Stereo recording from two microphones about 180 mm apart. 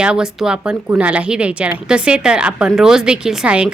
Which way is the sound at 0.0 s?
5° right (ahead or behind).